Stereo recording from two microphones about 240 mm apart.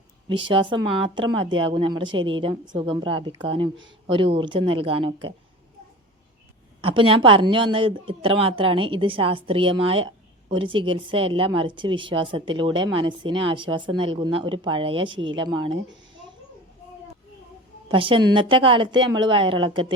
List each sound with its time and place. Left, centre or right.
0.3 s speech: right
6.8 s speech: right
17.8 s speech: right